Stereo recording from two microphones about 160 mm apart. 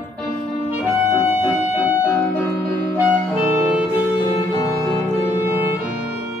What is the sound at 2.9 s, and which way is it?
Music, 10° right (ahead or behind).